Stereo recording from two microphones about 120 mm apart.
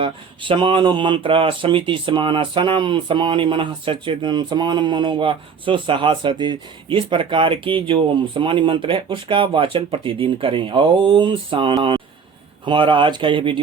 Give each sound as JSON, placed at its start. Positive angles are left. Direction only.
{"t": 0.0, "sound": "speech", "side_deg": -45}